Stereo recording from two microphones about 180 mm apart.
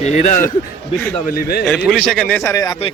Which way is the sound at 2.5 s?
20° left (ahead or behind).